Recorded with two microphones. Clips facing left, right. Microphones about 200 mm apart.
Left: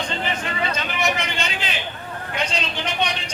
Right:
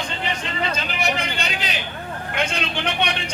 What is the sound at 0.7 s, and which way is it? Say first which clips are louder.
Vehicle: left 1 dB; 35° right (ahead or behind).